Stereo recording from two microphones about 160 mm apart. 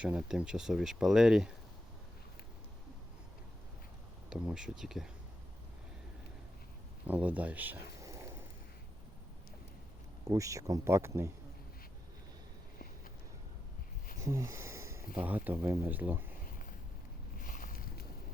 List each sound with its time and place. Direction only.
0.0 s speech: 5° right (ahead or behind)
4.3 s speech: 5° right (ahead or behind)
7.1 s speech: 10° right (ahead or behind)
10.2 s speech: 20° right (ahead or behind)
14.3 s a sound: 20° right (ahead or behind)
15.1 s speech: 10° right (ahead or behind)
17.3 s boat: 60° left (ahead or behind)